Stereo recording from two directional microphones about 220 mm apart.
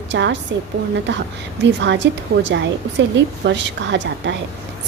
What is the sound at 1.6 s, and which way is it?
A woman's voice, 55° right (ahead or behind).